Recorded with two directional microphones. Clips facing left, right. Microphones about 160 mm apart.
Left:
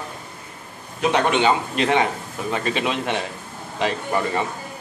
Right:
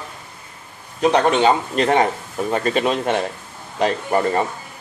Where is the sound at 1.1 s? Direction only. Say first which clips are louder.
Right 2 dB; 40° right (ahead or behind).